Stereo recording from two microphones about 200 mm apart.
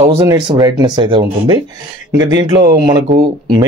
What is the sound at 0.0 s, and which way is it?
Speech, 15° right (ahead or behind).